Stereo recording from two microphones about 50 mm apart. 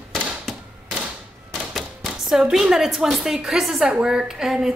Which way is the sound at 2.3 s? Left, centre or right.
Centre.